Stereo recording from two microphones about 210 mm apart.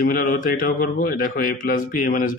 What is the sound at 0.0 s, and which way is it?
A man's voice, 40° left (ahead or behind).